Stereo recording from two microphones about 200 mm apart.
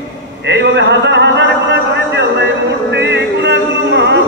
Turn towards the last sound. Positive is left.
turn(degrees=-60)  # may be behind; listen again after turning